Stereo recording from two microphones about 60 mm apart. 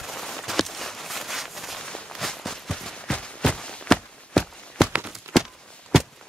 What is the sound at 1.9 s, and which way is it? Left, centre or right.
Walk, centre.